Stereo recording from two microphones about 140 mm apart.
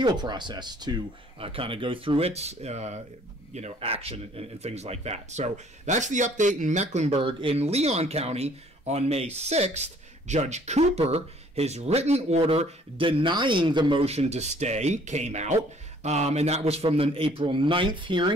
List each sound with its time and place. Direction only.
0.0 s speech: 30° right (ahead or behind); by 7.2 s 55° right (ahead or behind)
7.2 s speech: 40° right (ahead or behind)